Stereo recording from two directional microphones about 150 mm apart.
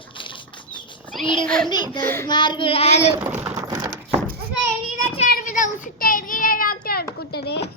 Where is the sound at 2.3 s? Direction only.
30° left (ahead or behind).